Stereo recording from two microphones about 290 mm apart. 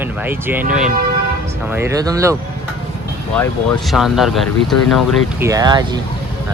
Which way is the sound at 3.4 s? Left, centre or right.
Centre.